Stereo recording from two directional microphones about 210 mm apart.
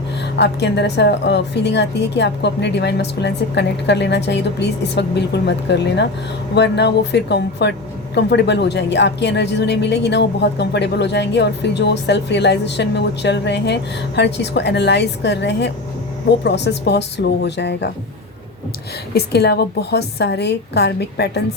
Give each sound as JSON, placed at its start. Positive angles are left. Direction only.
{"t": 0.3, "sound": "a woman's voice", "side_deg": 55}
{"t": 19.1, "sound": "a woman's voice", "side_deg": 50}